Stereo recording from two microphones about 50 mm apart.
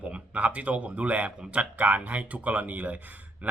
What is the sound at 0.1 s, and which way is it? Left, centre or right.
A man's voice, right.